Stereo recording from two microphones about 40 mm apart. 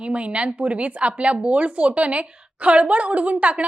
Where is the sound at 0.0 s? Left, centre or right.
Right.